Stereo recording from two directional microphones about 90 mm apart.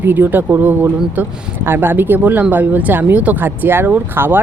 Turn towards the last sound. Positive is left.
turn(degrees=-25)  # may be behind; listen again after turning